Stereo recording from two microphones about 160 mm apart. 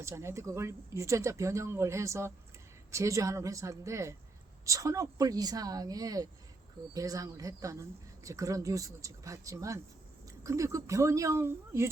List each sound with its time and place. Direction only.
0.0 s speech: 20° right (ahead or behind)